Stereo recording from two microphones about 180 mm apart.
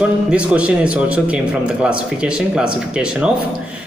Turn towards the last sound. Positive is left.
turn(degrees=-5)  # may be behind; listen again after turning